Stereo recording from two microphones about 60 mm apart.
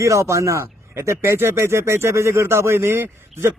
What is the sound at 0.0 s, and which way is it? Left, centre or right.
Speech, right.